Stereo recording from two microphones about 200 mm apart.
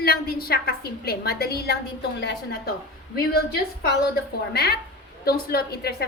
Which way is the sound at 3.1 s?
50° left (ahead or behind).